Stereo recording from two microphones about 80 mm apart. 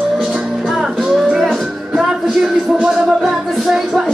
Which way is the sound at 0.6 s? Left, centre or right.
Centre.